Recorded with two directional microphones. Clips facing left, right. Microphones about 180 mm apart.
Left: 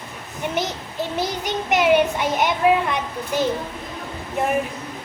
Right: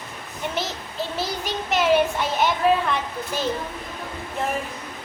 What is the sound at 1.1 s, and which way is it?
A child's voice, 15° left (ahead or behind).